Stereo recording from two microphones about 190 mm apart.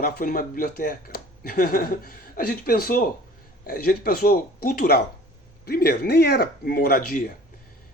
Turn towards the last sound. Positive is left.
turn(degrees=50)  # may be behind; listen again after turning